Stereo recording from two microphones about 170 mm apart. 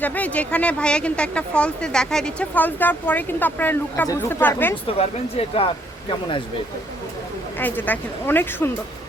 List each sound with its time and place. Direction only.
0.0 s speech: 10° left (ahead or behind)
4.9 s speech: 35° left (ahead or behind)
7.6 s speech: 10° left (ahead or behind)